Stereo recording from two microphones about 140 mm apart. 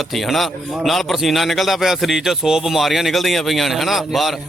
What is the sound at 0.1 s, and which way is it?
Speech, centre (ahead or behind).